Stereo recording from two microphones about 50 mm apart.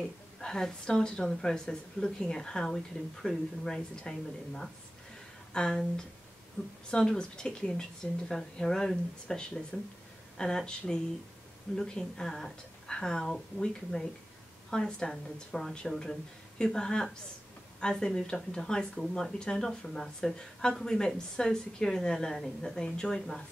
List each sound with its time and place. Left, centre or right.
0.4 s speech: centre
5.5 s speech: centre
6.6 s a woman's voice: left
6.9 s speech: centre